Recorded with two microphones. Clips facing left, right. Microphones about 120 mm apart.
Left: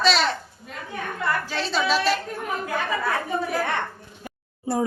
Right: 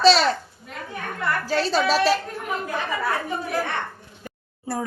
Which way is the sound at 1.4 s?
40° right (ahead or behind).